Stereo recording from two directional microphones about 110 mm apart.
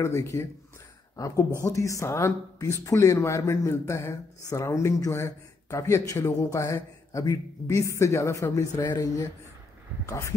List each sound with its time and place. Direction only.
0.0 s a woman's voice: 25° left (ahead or behind)